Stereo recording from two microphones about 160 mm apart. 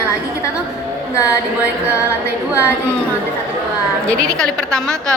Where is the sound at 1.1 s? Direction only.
20° left (ahead or behind).